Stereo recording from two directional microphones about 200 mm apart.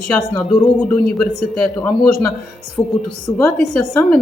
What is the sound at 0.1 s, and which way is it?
Speech, 5° left (ahead or behind).